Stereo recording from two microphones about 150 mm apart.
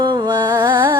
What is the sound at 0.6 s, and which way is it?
Music, 30° right (ahead or behind).